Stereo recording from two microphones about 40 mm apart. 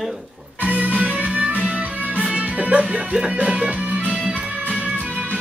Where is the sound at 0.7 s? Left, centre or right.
Right.